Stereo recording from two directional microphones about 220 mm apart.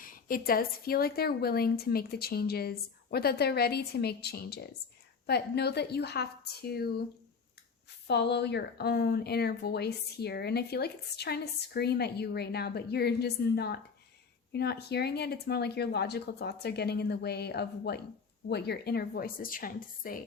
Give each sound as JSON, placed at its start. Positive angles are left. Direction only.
{"t": 0.0, "sound": "speech", "side_deg": 40}
{"t": 8.0, "sound": "speech", "side_deg": 50}